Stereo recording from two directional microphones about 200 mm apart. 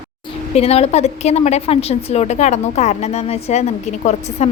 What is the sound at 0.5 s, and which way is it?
A woman's voice, 30° left (ahead or behind).